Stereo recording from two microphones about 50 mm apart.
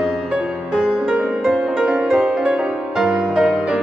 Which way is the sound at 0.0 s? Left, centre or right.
Centre.